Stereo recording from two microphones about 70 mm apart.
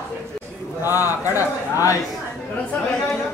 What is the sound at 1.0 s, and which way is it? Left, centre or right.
A man's voice, left.